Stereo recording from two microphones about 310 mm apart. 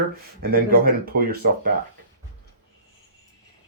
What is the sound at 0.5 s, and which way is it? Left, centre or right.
Speech, right.